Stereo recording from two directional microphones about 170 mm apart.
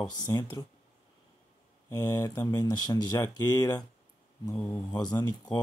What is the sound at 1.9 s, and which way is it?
Speech, 20° left (ahead or behind).